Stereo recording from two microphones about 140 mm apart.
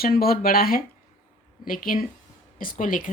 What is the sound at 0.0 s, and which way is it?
Speech, 90° left.